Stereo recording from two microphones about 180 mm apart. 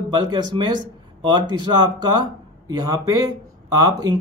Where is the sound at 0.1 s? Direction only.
25° right (ahead or behind).